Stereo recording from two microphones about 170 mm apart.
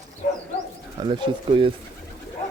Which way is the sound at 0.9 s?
25° right (ahead or behind).